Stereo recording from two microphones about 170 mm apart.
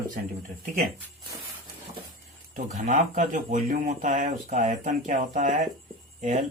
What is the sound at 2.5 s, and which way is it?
Speech, 50° right (ahead or behind).